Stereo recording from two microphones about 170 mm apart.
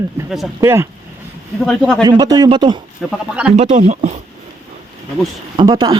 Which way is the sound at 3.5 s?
45° right (ahead or behind).